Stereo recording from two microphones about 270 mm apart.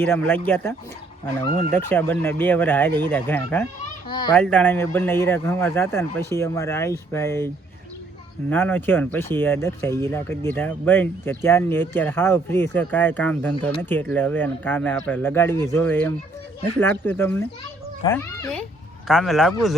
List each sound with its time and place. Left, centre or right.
0.0 s speech: centre
4.4 s speech: centre
19.0 s speech: centre